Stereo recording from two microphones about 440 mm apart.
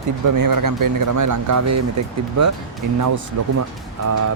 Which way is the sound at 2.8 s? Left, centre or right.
Right.